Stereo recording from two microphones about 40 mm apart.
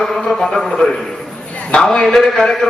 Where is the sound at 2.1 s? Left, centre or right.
Centre.